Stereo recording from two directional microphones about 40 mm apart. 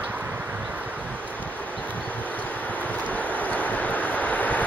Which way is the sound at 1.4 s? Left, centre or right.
Left.